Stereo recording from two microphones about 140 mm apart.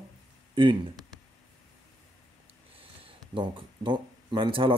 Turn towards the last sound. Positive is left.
turn(degrees=-40)  # may be behind; listen again after turning